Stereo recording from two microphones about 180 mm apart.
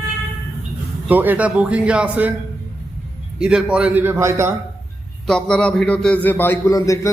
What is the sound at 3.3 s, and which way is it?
A man's voice, 5° right (ahead or behind).